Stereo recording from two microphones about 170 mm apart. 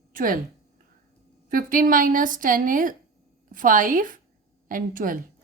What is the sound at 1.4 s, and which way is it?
A woman's voice, 55° right (ahead or behind).